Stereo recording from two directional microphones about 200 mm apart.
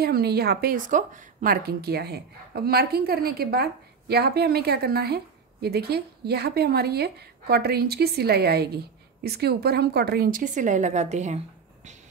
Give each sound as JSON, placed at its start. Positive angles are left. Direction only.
{"t": 0.0, "sound": "a woman's voice", "side_deg": -50}